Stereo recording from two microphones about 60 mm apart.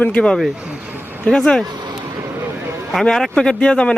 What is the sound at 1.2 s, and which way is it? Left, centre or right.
Speech, centre.